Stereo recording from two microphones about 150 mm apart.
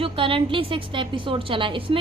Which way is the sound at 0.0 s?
35° right (ahead or behind).